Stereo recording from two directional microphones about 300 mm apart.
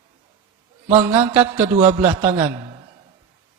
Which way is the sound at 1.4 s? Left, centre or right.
Centre.